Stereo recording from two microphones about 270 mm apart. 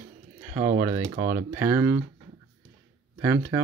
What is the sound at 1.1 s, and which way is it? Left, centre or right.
Speech, right.